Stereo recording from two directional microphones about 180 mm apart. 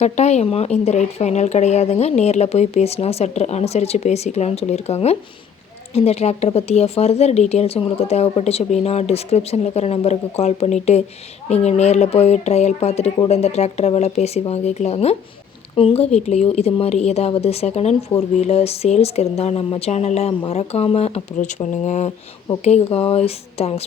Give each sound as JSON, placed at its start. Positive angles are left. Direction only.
{"t": 0.0, "sound": "a woman's voice", "side_deg": 40}